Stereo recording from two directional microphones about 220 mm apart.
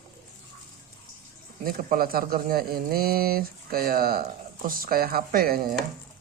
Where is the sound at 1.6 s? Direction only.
40° right (ahead or behind).